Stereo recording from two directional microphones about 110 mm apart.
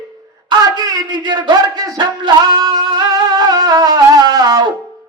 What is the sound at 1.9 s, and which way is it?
Wind instrument, 40° right (ahead or behind).